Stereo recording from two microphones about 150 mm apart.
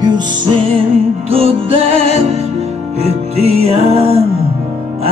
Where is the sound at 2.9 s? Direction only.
45° right (ahead or behind).